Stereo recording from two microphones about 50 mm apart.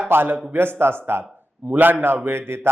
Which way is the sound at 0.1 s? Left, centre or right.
Right.